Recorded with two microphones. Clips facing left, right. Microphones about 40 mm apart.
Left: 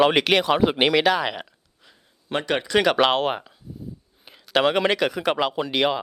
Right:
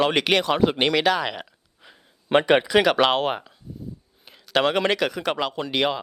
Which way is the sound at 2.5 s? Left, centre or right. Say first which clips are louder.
Left 1 dB; centre.